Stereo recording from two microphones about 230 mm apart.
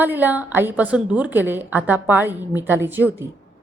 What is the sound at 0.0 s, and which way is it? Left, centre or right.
A woman's voice, centre.